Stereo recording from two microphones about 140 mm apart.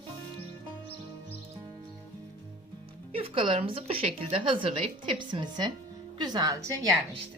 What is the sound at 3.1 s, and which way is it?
Speech, 40° right (ahead or behind).